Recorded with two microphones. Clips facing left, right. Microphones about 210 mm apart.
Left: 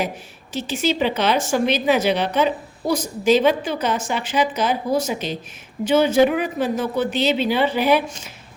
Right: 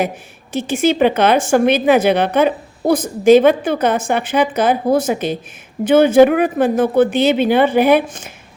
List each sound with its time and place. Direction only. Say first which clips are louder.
0.5 s a woman's voice: right 6 dB; 50° right (ahead or behind)